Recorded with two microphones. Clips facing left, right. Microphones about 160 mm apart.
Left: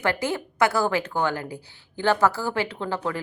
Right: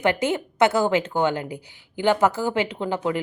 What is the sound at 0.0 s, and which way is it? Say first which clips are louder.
A woman's voice: right 4 dB; 20° right (ahead or behind).